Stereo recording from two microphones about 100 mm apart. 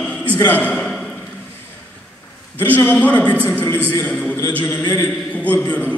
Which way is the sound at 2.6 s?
20° left (ahead or behind).